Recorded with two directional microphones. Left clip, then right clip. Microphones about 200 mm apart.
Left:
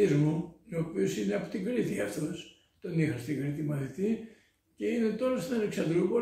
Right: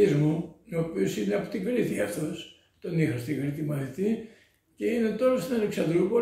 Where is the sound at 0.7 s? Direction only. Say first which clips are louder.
Right 3 dB; 5° right (ahead or behind).